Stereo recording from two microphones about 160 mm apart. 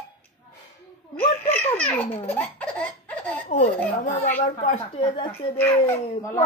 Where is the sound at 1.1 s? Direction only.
15° left (ahead or behind).